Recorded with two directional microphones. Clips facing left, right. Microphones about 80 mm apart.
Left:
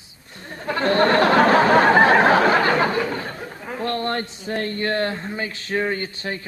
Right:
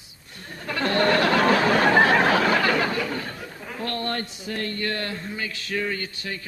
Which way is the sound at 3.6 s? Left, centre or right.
Left.